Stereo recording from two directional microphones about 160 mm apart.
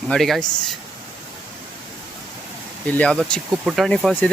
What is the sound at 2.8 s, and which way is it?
Speech, 10° left (ahead or behind).